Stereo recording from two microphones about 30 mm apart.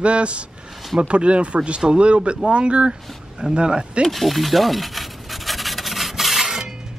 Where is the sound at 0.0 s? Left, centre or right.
Right.